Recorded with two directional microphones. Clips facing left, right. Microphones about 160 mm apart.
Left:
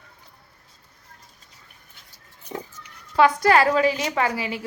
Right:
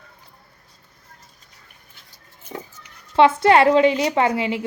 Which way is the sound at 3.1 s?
25° right (ahead or behind).